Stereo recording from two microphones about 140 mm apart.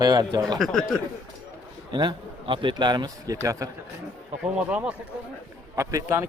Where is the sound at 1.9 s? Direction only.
35° right (ahead or behind).